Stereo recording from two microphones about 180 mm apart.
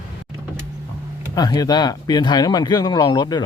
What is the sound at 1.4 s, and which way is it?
Speech, 20° left (ahead or behind).